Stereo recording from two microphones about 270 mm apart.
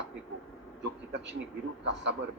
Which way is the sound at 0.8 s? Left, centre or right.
Right.